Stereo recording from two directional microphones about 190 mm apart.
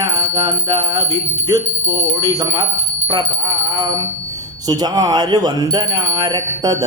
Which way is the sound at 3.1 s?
20° right (ahead or behind).